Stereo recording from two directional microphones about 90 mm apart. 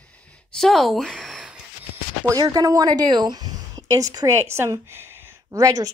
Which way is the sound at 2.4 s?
45° right (ahead or behind).